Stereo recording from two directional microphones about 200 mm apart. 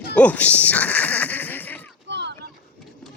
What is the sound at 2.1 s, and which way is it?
Boat, 60° right (ahead or behind).